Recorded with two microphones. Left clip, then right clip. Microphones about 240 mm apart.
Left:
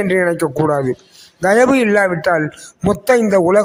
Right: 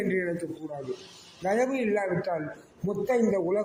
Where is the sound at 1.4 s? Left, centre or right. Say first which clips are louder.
Left 15 dB; left.